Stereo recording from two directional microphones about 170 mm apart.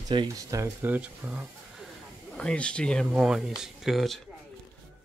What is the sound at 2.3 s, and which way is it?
Speech, 5° left (ahead or behind).